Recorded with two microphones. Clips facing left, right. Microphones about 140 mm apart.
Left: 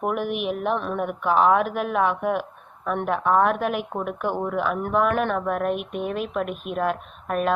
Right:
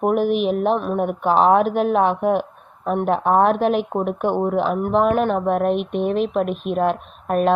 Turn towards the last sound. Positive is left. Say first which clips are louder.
# right 5 dB
turn(degrees=-30)  # may be behind; listen again after turning